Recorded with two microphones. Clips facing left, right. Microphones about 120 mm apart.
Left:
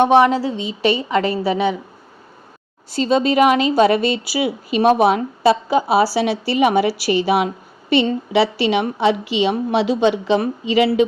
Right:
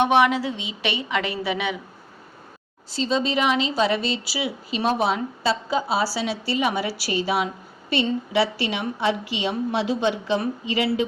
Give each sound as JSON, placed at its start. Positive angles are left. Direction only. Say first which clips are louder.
{"t": 0.0, "sound": "a woman's voice", "louder": "left 5 dB", "side_deg": 35}
{"t": 2.9, "sound": "speech", "louder": "left 7 dB", "side_deg": 55}